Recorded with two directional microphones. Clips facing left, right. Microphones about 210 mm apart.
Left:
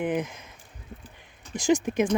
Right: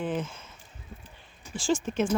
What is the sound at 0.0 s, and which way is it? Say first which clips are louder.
Speech: left 4 dB; 15° left (ahead or behind).